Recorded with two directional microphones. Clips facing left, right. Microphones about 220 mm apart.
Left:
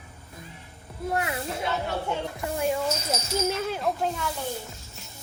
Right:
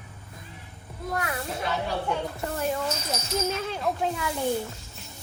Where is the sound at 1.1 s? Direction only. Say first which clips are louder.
Left 1 dB; 25° left (ahead or behind).